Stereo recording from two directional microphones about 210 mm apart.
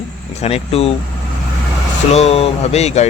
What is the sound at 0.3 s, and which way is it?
Speech, 30° left (ahead or behind).